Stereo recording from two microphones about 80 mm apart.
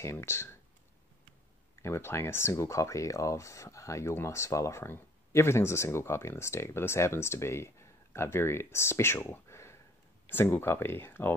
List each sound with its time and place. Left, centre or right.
0.0 s speech: left
1.8 s speech: left